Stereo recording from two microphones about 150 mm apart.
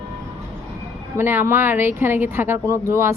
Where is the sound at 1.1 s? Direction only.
15° right (ahead or behind).